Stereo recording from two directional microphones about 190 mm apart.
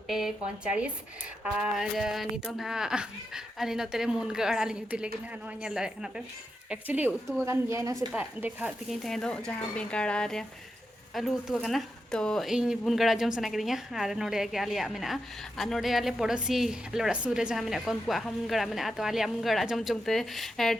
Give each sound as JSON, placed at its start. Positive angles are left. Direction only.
{"t": 0.1, "sound": "speech", "side_deg": 0}
{"t": 8.1, "sound": "speech", "side_deg": -5}
{"t": 9.0, "sound": "speech", "side_deg": 5}